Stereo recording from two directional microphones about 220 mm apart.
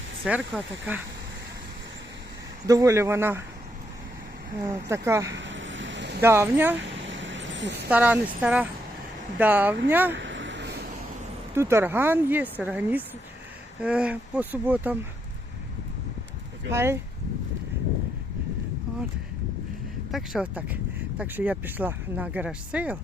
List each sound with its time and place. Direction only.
0.3 s speech: 5° right (ahead or behind)
2.6 s speech: 15° right (ahead or behind)
4.6 s speech: 10° right (ahead or behind)
5.3 s vehicle: 55° right (ahead or behind)
6.2 s speech: 10° right (ahead or behind)
6.9 s vehicle: 55° right (ahead or behind)
7.9 s speech: 5° right (ahead or behind)
10.2 s a sound: 55° right (ahead or behind)
11.5 s speech: 10° right (ahead or behind)
16.7 s speech: 10° right (ahead or behind)
20.1 s speech: centre (ahead or behind)